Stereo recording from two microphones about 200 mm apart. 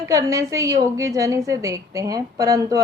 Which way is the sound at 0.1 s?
15° right (ahead or behind).